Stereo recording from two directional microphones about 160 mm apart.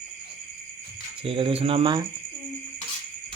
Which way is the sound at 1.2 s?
35° right (ahead or behind).